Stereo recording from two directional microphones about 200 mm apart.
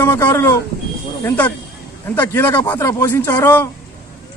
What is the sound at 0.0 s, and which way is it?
A man's voice, 10° left (ahead or behind).